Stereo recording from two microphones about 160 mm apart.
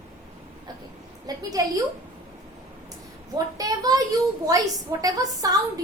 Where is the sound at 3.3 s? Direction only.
25° right (ahead or behind).